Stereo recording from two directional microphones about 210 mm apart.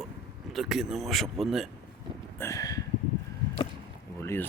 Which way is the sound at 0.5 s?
Centre (ahead or behind).